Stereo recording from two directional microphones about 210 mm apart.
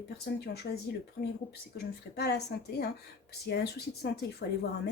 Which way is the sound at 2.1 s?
50° left (ahead or behind).